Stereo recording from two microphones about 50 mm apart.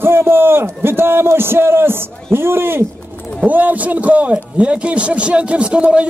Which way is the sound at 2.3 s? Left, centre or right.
Right.